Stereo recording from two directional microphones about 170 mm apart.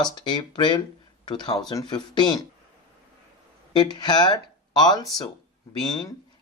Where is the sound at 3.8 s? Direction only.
25° left (ahead or behind).